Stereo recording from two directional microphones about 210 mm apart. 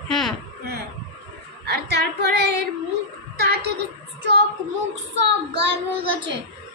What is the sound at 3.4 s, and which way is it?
Speech, 50° right (ahead or behind).